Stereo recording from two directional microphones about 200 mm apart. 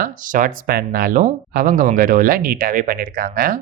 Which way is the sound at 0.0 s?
40° right (ahead or behind).